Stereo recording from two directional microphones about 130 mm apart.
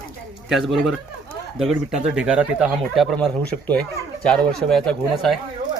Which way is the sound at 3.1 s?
10° left (ahead or behind).